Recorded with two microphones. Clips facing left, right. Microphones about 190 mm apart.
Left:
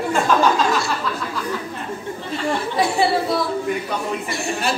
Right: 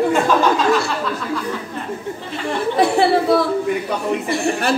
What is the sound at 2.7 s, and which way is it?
A woman's voice, 60° right (ahead or behind).